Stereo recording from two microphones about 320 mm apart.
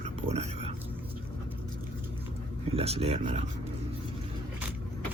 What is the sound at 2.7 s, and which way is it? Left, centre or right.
Speech, centre.